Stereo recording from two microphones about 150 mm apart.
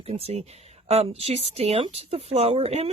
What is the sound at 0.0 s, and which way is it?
Speech, 40° right (ahead or behind).